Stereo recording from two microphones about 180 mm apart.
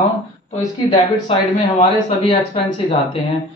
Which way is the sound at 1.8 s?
30° left (ahead or behind).